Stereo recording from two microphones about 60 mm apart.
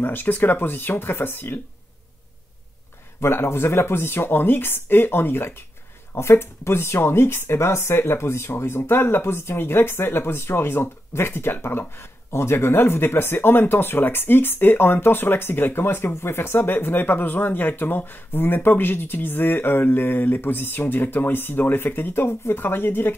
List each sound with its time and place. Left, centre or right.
0.0 s speech: left
3.2 s speech: left